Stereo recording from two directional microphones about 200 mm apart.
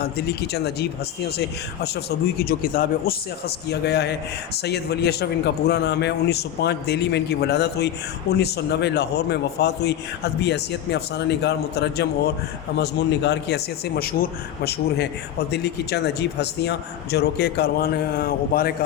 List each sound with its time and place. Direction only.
0.0 s a man's voice: 55° left (ahead or behind)